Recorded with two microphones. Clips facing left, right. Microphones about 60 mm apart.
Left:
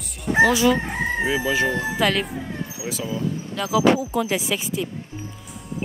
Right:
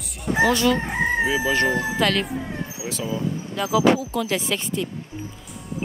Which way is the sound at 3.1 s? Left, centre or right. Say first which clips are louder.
Right 1 dB; centre.